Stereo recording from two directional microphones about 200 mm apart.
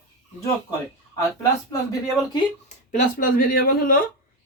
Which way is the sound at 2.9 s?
40° left (ahead or behind).